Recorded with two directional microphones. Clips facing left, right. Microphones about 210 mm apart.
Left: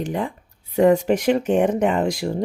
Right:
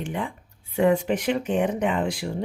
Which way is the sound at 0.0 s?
40° left (ahead or behind).